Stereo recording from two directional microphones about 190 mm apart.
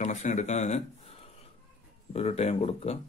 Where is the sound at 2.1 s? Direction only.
35° left (ahead or behind).